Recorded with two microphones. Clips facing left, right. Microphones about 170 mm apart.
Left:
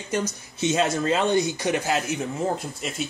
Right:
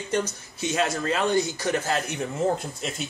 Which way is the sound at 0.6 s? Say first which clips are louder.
Left 3 dB; 20° left (ahead or behind).